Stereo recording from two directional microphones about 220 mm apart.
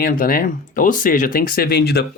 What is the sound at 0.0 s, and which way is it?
Speech, 40° left (ahead or behind).